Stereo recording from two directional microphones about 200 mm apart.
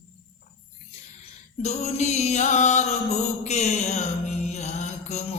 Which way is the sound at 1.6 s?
35° left (ahead or behind).